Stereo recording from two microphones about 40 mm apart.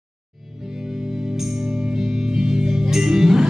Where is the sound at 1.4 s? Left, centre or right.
Centre.